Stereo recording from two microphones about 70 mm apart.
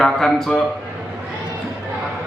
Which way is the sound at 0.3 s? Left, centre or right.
Centre.